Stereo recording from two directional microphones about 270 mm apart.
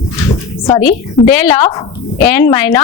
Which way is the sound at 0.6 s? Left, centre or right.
Left.